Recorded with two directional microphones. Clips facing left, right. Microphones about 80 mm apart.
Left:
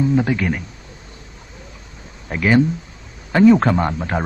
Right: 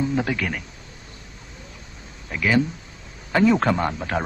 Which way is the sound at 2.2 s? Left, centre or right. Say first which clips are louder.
Left 5 dB; left.